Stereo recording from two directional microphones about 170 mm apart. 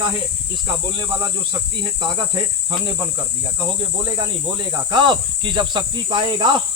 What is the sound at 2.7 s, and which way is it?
Cricket, 25° right (ahead or behind).